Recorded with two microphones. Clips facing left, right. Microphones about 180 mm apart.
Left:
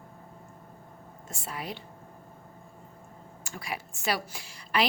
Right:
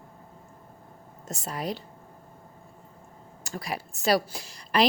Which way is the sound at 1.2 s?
40° right (ahead or behind).